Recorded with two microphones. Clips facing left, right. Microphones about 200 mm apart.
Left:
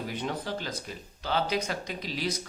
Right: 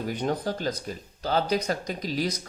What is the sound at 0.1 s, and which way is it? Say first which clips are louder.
Speech: right 8 dB; 45° right (ahead or behind).